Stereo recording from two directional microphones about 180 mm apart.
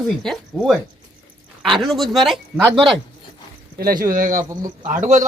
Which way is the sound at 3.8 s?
55° right (ahead or behind).